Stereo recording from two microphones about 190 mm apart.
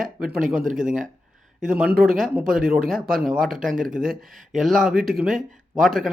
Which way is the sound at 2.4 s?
50° right (ahead or behind).